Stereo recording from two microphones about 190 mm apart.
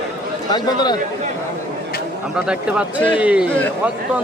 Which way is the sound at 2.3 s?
5° right (ahead or behind).